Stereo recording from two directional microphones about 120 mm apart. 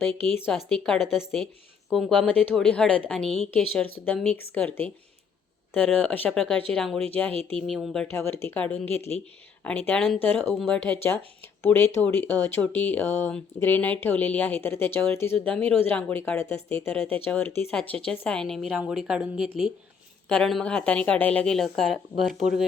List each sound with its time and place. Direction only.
0.5 s a woman's voice: 5° left (ahead or behind)
2.2 s a woman's voice: 15° left (ahead or behind)
7.7 s a woman's voice: centre (ahead or behind)
8.1 s a woman's voice: 20° left (ahead or behind)
15.5 s a woman's voice: 5° left (ahead or behind)
17.7 s a woman's voice: 5° left (ahead or behind)
20.2 s a woman's voice: 5° left (ahead or behind)